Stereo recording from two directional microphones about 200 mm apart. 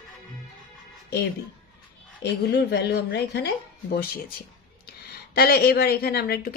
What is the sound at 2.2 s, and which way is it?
Speech, 55° left (ahead or behind).